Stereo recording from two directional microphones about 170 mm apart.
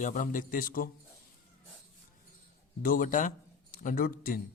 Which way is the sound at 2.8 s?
55° left (ahead or behind).